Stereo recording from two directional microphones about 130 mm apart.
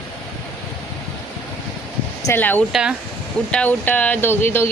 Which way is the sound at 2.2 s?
15° left (ahead or behind).